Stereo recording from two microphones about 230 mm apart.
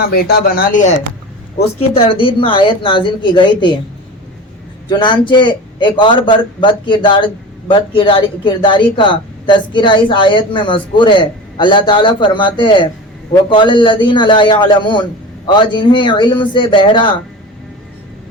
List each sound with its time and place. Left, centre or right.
0.0 s speech: left
1.5 s a man's voice: left
4.9 s a man's voice: centre